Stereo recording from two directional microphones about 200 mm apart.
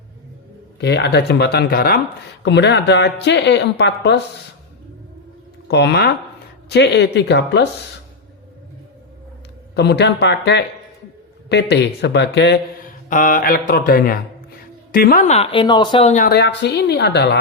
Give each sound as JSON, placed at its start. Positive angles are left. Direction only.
{"t": 0.8, "sound": "speech", "side_deg": 60}
{"t": 2.4, "sound": "speech", "side_deg": 60}
{"t": 5.6, "sound": "speech", "side_deg": 60}
{"t": 9.7, "sound": "speech", "side_deg": 55}
{"t": 13.1, "sound": "speech", "side_deg": 40}